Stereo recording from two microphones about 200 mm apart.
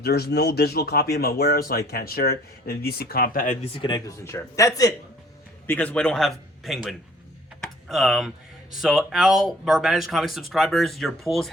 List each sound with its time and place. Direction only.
0.0 s speech: 50° left (ahead or behind)
3.8 s speech: 20° left (ahead or behind)
5.6 s speech: 5° left (ahead or behind)
7.6 s typing: centre (ahead or behind)
8.7 s speech: centre (ahead or behind)